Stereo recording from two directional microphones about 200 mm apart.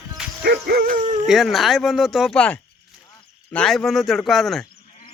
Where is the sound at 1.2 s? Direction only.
Centre (ahead or behind).